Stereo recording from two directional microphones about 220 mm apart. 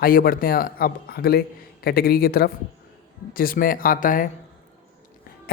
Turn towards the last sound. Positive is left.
turn(degrees=40)  # may be behind; listen again after turning